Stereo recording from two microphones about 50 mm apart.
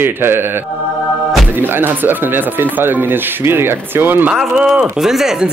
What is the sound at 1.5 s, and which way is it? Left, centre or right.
Speech, right.